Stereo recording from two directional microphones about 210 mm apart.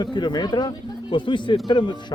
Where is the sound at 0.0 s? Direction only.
20° left (ahead or behind).